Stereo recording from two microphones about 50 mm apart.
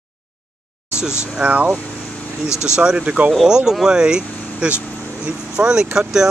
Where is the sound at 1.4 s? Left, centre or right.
Right.